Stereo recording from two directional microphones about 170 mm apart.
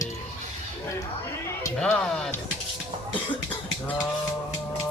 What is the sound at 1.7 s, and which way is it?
Speech, 5° left (ahead or behind).